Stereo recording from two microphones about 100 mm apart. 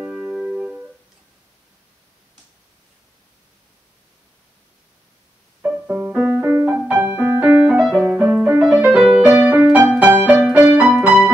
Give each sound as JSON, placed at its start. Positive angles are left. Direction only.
{"t": 0.0, "sound": "music", "side_deg": -15}
{"t": 5.6, "sound": "music", "side_deg": -10}
{"t": 8.2, "sound": "music", "side_deg": -15}